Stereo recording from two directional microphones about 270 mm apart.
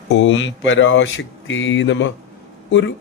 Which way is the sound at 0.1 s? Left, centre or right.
Left.